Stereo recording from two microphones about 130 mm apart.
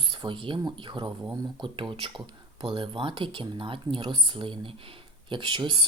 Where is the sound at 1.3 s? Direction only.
25° right (ahead or behind).